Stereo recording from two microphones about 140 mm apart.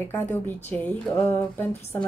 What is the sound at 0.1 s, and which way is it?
Speech, 15° left (ahead or behind).